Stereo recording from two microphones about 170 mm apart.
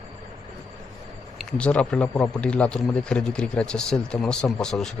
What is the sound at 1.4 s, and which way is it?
Speech, 5° left (ahead or behind).